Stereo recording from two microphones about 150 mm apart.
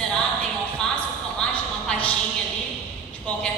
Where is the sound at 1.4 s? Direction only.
5° left (ahead or behind).